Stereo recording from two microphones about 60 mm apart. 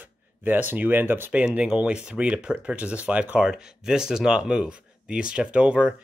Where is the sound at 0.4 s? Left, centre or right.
Right.